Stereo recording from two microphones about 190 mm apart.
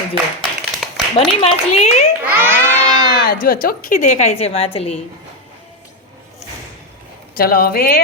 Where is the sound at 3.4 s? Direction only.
50° left (ahead or behind); by 5.0 s 30° left (ahead or behind).